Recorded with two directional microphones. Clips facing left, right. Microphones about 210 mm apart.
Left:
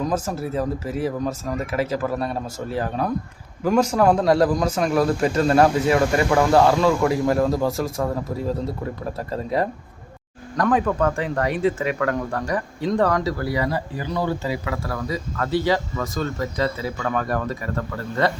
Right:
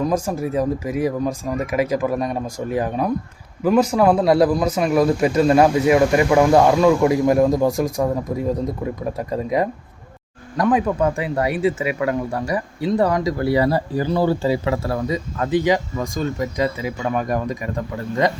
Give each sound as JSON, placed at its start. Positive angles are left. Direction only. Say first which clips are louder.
{"t": 0.0, "sound": "speech", "louder": "right 3 dB", "side_deg": -10}
{"t": 9.1, "sound": "speech", "louder": "right 2 dB", "side_deg": -15}
{"t": 13.4, "sound": "speech", "louder": "right 6 dB", "side_deg": -30}